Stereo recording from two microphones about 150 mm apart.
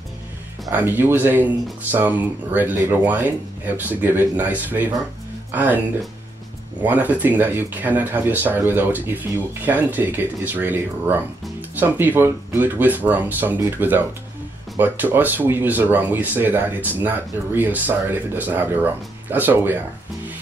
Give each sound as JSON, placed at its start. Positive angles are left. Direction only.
{"t": 0.7, "sound": "speech", "side_deg": -15}
{"t": 6.8, "sound": "speech", "side_deg": -10}